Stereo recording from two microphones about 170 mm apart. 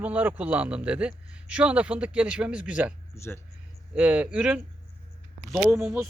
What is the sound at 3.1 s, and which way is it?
Speech, 15° left (ahead or behind).